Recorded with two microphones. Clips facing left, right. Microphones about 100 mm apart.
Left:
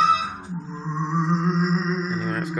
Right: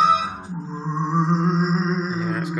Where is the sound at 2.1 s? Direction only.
5° right (ahead or behind).